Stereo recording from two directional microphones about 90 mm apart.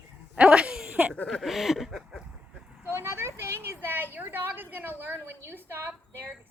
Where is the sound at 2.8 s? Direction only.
25° right (ahead or behind).